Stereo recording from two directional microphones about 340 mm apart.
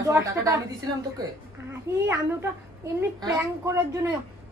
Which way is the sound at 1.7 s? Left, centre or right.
Centre.